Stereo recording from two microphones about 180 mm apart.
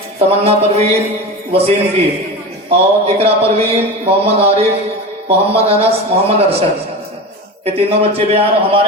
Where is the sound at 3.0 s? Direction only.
35° right (ahead or behind).